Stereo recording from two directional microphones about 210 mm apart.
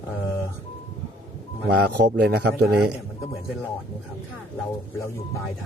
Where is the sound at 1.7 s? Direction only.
50° right (ahead or behind).